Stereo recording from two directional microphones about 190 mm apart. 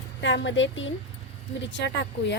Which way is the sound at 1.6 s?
70° left (ahead or behind).